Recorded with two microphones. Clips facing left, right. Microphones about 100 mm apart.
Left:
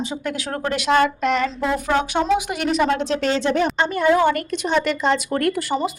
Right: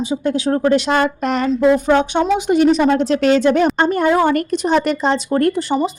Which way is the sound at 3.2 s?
55° right (ahead or behind).